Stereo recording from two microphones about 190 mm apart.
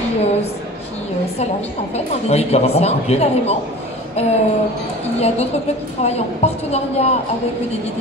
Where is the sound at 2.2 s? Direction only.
35° left (ahead or behind).